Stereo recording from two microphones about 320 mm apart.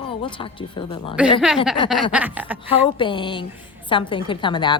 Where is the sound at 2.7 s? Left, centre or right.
Centre.